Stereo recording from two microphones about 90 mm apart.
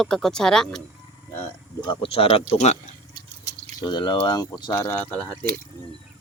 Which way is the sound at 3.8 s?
55° left (ahead or behind).